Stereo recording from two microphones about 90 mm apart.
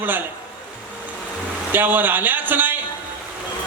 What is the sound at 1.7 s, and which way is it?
A man's voice, 20° right (ahead or behind).